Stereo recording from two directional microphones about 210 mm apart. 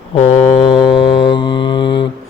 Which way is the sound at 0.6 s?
20° left (ahead or behind).